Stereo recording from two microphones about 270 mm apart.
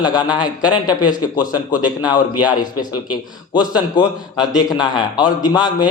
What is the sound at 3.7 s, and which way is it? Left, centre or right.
A man's voice, centre.